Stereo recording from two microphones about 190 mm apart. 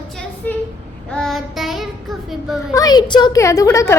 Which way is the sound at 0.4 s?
10° left (ahead or behind).